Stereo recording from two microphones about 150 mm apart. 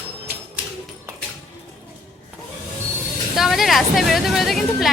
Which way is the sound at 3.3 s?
Centre (ahead or behind).